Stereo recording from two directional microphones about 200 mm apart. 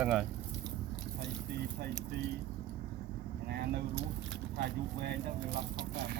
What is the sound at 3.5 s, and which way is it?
Speech, 55° right (ahead or behind).